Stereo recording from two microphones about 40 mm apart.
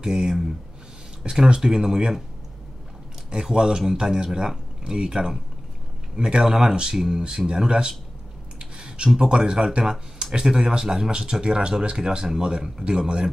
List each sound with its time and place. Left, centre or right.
0.0 s speech: centre
3.3 s speech: centre
8.5 s a sound: right
9.1 s speech: centre